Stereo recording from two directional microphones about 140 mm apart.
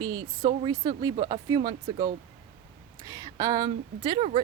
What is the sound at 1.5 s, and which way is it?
Speech, 30° right (ahead or behind).